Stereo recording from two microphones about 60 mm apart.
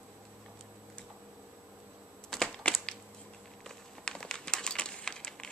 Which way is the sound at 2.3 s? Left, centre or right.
Centre.